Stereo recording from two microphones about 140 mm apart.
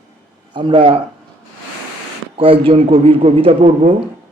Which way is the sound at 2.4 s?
40° right (ahead or behind).